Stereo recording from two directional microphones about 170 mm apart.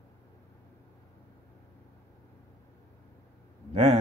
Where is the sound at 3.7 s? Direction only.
35° right (ahead or behind).